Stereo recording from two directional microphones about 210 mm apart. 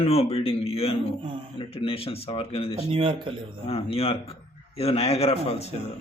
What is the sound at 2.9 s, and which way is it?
Speech, 25° right (ahead or behind).